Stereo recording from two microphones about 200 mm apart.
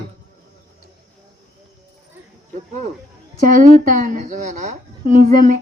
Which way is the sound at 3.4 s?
40° right (ahead or behind).